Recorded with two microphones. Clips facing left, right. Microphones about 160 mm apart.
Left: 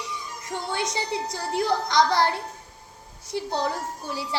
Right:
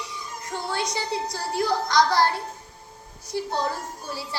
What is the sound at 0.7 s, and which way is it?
A woman's voice, 20° left (ahead or behind).